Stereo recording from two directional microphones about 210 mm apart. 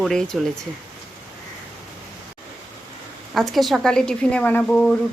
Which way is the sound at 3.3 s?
Centre (ahead or behind).